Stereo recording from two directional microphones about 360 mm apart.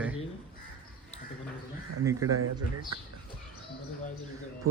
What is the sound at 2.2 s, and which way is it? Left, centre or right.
Speech, right.